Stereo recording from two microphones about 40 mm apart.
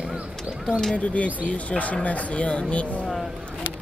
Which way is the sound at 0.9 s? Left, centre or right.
Left.